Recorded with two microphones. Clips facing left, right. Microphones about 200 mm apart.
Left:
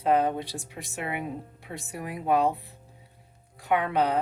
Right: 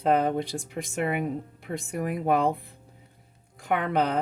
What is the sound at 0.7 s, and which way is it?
Speech, 50° right (ahead or behind).